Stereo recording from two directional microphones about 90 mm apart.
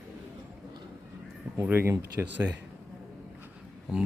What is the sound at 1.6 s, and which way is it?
Speech, 25° right (ahead or behind).